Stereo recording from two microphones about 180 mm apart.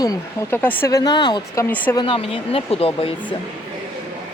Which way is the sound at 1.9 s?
30° left (ahead or behind).